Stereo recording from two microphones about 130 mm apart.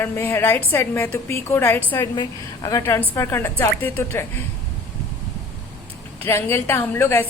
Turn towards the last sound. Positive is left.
turn(degrees=15)  # may be behind; listen again after turning